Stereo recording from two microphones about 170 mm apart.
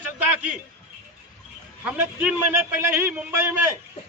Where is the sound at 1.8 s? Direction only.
10° right (ahead or behind).